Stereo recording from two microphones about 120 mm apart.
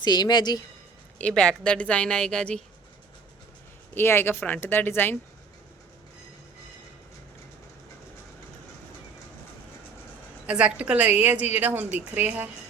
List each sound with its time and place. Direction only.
0.0 s speech: 35° left (ahead or behind)
1.2 s a woman's voice: 5° left (ahead or behind)
3.9 s a woman's voice: 20° left (ahead or behind)
10.4 s a woman's voice: 10° right (ahead or behind)